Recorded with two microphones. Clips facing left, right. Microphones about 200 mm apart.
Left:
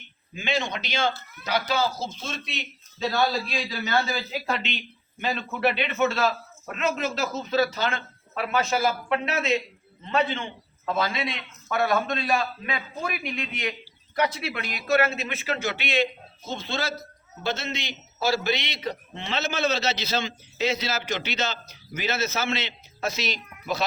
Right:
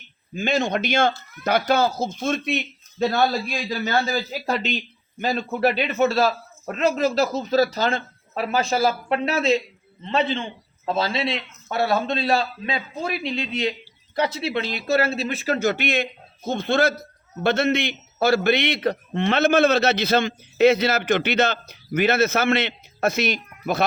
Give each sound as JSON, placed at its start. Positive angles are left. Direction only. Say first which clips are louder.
{"t": 0.3, "sound": "a man's voice", "louder": "right 6 dB", "side_deg": -45}